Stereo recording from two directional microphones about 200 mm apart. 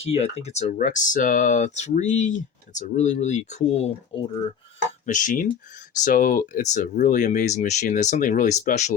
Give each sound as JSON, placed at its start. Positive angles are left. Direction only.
{"t": 0.0, "sound": "speech", "side_deg": 30}